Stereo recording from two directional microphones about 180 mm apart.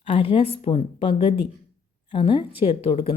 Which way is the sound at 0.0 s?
30° left (ahead or behind).